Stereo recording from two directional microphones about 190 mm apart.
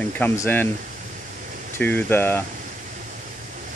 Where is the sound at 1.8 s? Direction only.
10° left (ahead or behind).